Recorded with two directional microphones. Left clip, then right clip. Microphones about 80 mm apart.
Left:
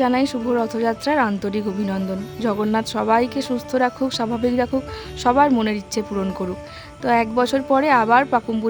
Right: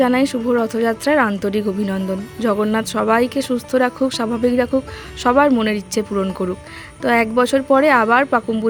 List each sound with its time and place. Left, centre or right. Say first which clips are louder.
0.0 s speech: right 3 dB; right